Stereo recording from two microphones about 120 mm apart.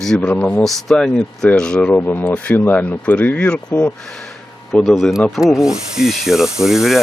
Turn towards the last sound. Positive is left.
turn(degrees=-5)  # may be behind; listen again after turning